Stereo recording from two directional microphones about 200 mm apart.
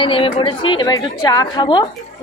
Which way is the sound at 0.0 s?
25° left (ahead or behind).